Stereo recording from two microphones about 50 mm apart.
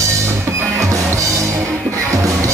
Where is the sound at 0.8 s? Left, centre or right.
Right.